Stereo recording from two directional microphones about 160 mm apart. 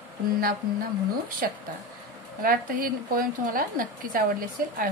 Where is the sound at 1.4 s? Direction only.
65° right (ahead or behind).